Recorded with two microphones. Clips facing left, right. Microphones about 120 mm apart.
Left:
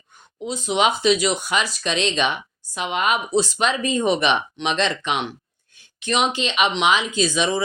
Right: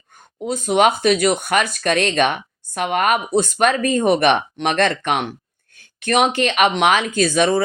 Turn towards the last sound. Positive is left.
turn(degrees=-55)  # may be behind; listen again after turning